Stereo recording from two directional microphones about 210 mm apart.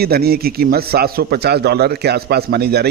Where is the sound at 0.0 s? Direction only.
50° right (ahead or behind).